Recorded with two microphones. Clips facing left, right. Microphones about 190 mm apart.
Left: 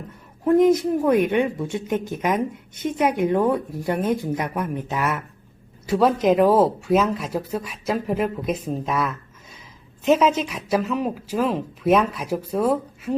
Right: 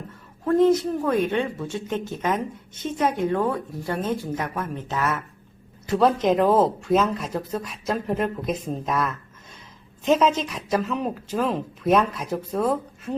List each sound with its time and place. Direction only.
0.4 s speech: 15° left (ahead or behind)